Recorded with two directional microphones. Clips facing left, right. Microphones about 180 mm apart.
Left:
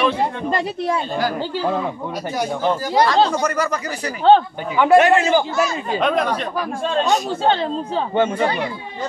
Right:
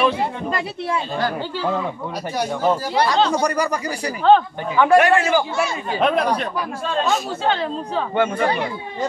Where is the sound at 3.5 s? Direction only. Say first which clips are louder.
Even; 15° right (ahead or behind).